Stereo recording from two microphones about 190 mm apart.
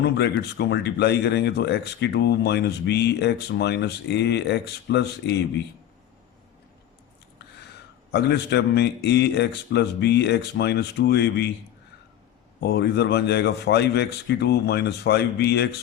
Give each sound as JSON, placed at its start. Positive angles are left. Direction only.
{"t": 0.0, "sound": "speech", "side_deg": 60}
{"t": 8.1, "sound": "speech", "side_deg": 60}
{"t": 12.5, "sound": "speech", "side_deg": 60}